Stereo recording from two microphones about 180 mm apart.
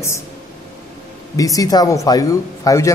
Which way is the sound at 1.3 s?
20° left (ahead or behind).